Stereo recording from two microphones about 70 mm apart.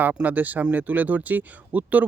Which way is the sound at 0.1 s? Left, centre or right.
Right.